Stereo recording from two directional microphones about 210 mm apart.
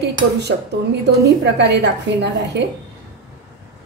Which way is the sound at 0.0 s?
50° right (ahead or behind).